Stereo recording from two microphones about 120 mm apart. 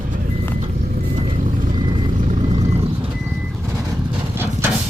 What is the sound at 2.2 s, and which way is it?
Vehicle, 75° right (ahead or behind).